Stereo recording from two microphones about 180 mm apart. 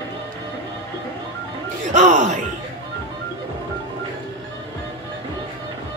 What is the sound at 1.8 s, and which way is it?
Music, 45° right (ahead or behind).